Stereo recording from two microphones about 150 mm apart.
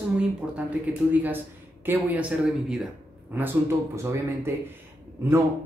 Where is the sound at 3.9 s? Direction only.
20° right (ahead or behind).